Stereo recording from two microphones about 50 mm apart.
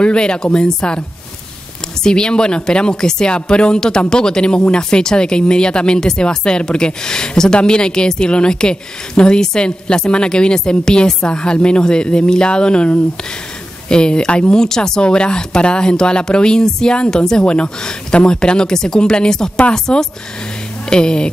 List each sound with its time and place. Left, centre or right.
0.0 s speech: centre
2.0 s speech: centre